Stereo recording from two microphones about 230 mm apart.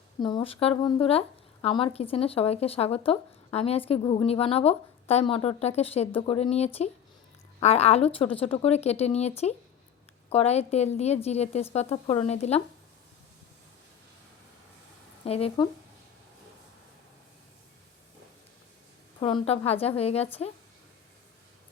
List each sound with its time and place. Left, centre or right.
0.2 s speech: centre
15.2 s speech: left
19.2 s speech: left